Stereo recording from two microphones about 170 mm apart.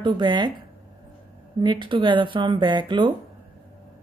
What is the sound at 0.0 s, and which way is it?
Speech, 25° right (ahead or behind).